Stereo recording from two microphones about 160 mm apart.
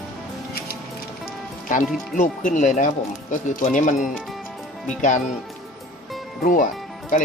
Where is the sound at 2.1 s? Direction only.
55° left (ahead or behind).